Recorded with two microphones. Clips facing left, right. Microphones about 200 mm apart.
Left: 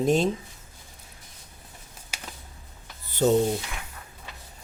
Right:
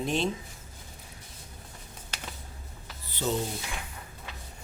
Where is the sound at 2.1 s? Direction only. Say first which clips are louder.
Even; 10° left (ahead or behind).